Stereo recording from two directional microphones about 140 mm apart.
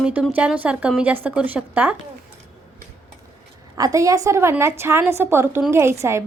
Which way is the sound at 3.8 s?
25° right (ahead or behind).